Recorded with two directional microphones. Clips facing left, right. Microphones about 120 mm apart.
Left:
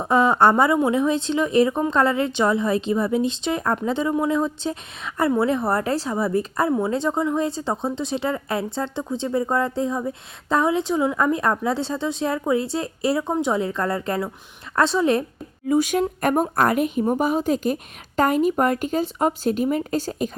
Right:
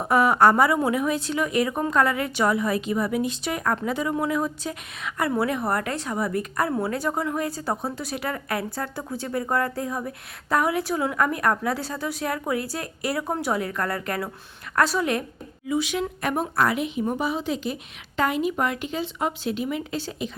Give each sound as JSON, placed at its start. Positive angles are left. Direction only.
{"t": 0.1, "sound": "a woman's voice", "side_deg": 25}
{"t": 15.6, "sound": "speech", "side_deg": 45}